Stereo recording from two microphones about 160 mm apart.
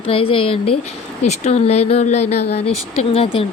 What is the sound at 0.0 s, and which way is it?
Speech, 35° left (ahead or behind).